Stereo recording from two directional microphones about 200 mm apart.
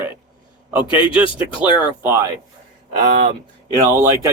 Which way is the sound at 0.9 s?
25° left (ahead or behind).